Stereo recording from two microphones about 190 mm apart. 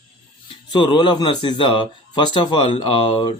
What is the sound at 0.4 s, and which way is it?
Speech, 25° left (ahead or behind).